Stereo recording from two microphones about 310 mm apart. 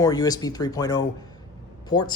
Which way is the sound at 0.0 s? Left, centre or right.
Centre.